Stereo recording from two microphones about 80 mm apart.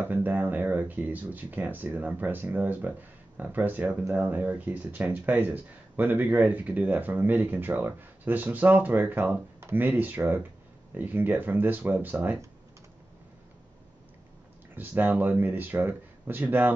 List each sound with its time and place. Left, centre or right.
0.1 s speech: right
14.8 s speech: right